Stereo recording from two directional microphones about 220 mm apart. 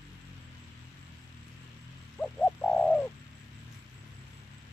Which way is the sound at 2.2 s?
5° left (ahead or behind).